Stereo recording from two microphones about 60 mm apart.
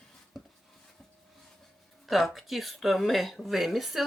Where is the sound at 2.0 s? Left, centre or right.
Centre.